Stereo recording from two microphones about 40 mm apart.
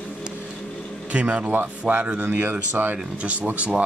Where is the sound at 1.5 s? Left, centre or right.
Right.